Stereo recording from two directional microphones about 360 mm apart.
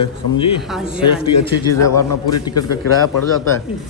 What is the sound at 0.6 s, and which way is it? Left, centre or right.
Speech, centre.